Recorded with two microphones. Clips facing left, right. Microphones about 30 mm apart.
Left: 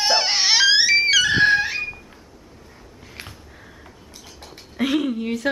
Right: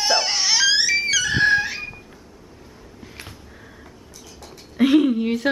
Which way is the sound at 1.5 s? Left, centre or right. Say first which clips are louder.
Left 1 dB; centre.